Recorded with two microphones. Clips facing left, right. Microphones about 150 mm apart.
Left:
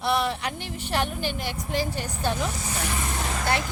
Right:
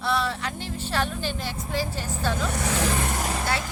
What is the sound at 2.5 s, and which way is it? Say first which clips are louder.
Speech: right 6 dB; 80° right.